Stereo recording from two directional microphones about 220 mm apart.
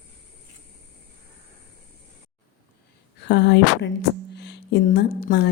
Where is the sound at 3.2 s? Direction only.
50° left (ahead or behind).